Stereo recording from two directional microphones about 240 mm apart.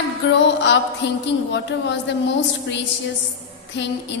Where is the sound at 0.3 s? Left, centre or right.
Left.